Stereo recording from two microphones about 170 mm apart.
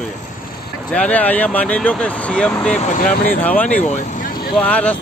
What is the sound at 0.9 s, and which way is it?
Speech, 10° left (ahead or behind).